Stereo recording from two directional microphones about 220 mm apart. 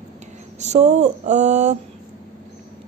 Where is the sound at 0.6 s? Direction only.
30° right (ahead or behind).